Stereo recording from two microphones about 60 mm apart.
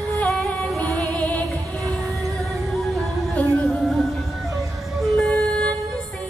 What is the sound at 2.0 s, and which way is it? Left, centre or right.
Music, right.